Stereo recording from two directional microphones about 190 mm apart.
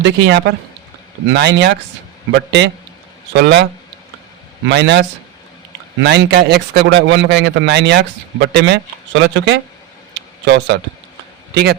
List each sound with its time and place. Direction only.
0.0 s a man's voice: 65° right (ahead or behind)
4.7 s a man's voice: 65° right (ahead or behind)